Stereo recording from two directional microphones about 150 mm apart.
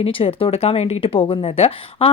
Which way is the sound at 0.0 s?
40° left (ahead or behind).